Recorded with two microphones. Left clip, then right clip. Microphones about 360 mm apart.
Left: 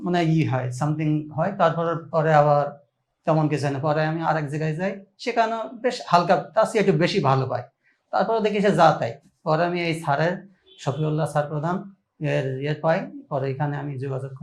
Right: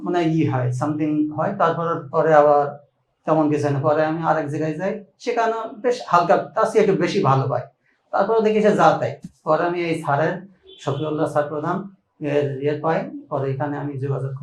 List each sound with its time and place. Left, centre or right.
0.0 s speech: left
8.1 s speech: left